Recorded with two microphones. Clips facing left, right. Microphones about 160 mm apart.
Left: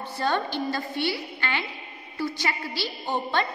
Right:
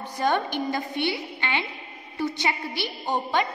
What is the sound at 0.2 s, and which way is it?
A woman's voice, 15° right (ahead or behind).